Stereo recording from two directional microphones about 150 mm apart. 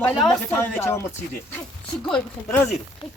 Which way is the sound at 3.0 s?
35° left (ahead or behind).